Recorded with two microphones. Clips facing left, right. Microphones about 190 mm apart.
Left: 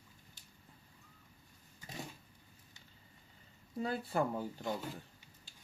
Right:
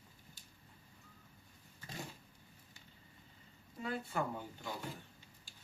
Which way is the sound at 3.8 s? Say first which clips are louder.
Left 4 dB; 35° left (ahead or behind).